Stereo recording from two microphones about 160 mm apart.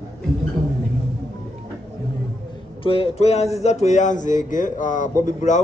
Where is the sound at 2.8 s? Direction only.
35° left (ahead or behind).